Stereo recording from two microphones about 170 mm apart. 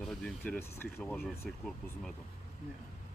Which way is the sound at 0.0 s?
5° left (ahead or behind).